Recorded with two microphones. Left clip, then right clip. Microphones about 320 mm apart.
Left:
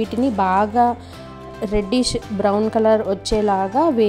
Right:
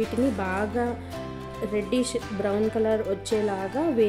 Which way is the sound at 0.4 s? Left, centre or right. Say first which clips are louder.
Left 11 dB; left.